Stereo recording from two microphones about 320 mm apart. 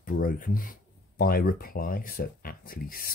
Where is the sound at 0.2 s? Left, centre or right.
Left.